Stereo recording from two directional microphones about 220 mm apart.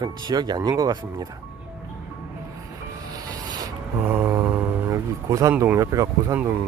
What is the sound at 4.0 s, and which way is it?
Speech, 10° right (ahead or behind).